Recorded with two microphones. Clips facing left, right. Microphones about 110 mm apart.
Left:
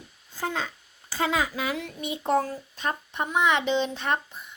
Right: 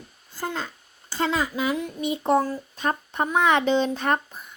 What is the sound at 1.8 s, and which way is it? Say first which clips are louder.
Child singing: right 5 dB; 45° right (ahead or behind).